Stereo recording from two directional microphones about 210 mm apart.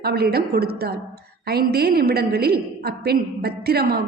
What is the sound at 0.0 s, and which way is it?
A woman's voice, 50° right (ahead or behind).